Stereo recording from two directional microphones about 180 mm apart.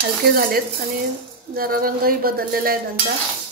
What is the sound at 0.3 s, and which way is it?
Speech, 55° right (ahead or behind).